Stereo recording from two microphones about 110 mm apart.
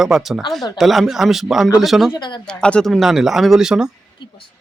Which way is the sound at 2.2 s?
45° left (ahead or behind).